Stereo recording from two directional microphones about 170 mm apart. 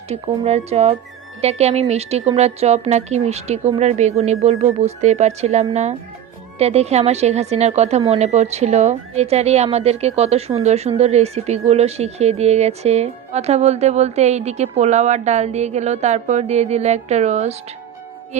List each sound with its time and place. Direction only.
0.1 s a woman's voice: 40° right (ahead or behind)